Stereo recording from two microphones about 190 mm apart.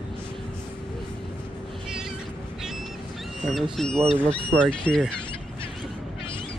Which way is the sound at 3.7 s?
Centre (ahead or behind).